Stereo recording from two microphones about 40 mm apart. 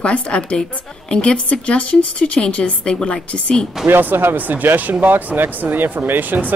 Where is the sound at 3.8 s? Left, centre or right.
Right.